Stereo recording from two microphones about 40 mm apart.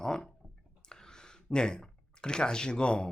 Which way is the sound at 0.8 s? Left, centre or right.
Centre.